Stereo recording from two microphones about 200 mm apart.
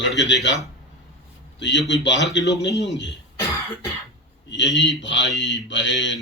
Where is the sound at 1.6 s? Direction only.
60° left (ahead or behind).